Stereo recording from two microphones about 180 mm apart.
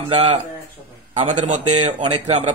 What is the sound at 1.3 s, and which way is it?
Speech, 40° right (ahead or behind).